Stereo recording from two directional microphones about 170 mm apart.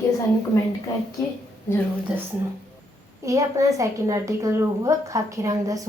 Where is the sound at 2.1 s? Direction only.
5° right (ahead or behind).